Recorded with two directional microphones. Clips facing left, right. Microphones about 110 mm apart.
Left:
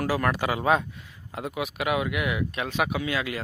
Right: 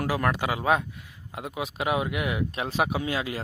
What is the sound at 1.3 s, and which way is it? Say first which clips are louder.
Speech: left 2 dB; 20° right (ahead or behind).